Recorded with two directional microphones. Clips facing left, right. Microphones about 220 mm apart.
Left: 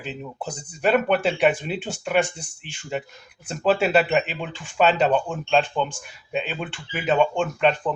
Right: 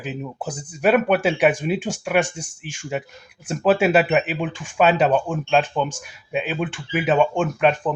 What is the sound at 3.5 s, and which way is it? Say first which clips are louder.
Speech: right 3 dB; 10° right (ahead or behind).